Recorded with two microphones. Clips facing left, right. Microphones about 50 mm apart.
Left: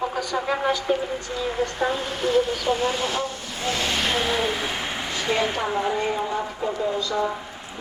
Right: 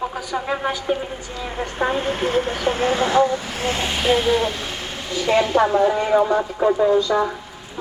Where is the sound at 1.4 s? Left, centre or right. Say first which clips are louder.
Right 1 dB; right.